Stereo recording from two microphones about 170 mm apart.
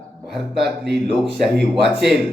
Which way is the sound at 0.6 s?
75° right (ahead or behind).